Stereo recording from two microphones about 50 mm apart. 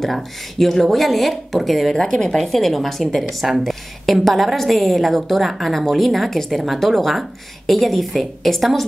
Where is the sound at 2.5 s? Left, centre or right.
Centre.